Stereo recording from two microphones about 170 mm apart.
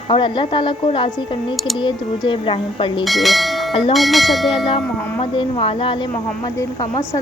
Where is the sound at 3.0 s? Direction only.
Centre (ahead or behind).